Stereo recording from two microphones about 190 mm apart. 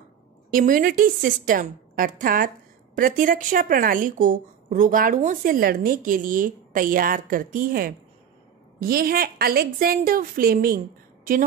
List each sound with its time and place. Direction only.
0.5 s a woman's voice: 45° right (ahead or behind)